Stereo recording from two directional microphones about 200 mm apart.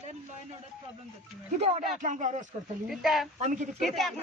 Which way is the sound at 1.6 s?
35° right (ahead or behind).